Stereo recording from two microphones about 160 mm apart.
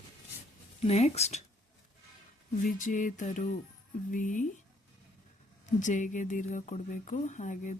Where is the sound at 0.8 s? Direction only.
40° left (ahead or behind).